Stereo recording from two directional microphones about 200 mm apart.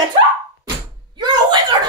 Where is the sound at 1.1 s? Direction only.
20° right (ahead or behind).